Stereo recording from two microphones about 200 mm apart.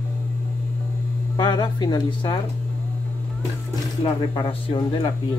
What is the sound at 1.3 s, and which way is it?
Speech, 20° left (ahead or behind).